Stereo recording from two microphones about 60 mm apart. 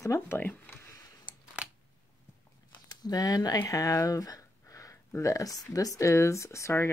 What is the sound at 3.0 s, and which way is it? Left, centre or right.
Speech, left.